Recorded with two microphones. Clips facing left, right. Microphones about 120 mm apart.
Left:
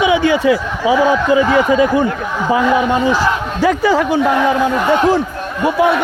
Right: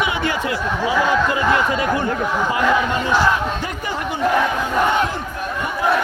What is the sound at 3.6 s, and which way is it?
Speech, 90° left.